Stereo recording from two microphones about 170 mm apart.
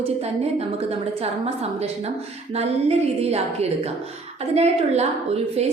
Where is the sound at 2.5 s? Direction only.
40° right (ahead or behind).